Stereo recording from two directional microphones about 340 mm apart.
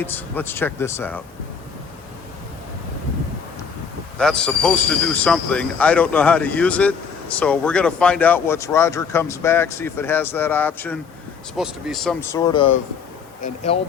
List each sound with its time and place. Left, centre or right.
0.0 s speech: centre
4.2 s speech: centre